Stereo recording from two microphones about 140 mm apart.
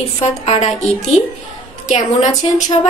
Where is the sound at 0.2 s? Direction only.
50° left (ahead or behind).